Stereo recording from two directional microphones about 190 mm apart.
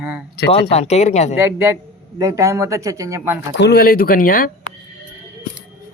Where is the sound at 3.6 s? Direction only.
60° left (ahead or behind).